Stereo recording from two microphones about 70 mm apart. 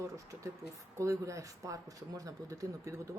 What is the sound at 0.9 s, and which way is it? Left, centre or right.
Speech, right.